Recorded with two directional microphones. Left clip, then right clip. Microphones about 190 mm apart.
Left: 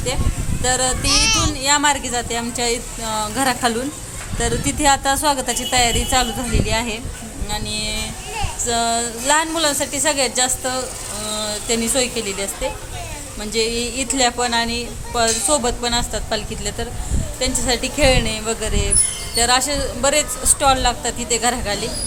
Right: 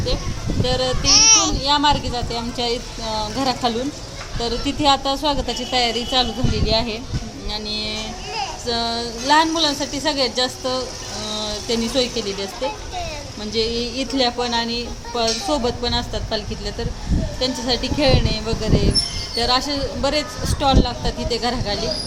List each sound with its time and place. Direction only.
0.6 s a woman's voice: 5° left (ahead or behind)
1.1 s a child's voice: 35° right (ahead or behind)
1.6 s a woman's voice: 5° left (ahead or behind)